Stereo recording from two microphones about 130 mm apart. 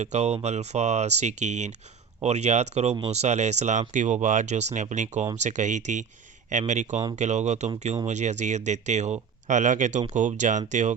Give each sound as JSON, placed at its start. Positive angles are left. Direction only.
{"t": 0.0, "sound": "speech", "side_deg": -60}